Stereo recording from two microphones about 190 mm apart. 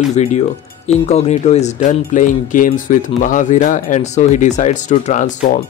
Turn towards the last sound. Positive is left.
turn(degrees=40)  # may be behind; listen again after turning